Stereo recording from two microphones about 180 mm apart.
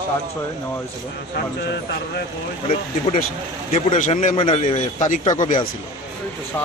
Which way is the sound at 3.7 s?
40° left (ahead or behind).